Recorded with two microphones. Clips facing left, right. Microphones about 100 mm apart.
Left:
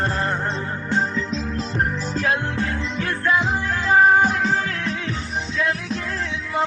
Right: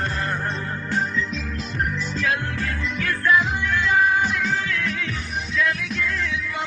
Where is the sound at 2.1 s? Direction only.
35° left (ahead or behind).